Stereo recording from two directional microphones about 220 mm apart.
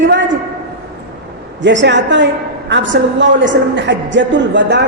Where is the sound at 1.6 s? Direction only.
55° right (ahead or behind).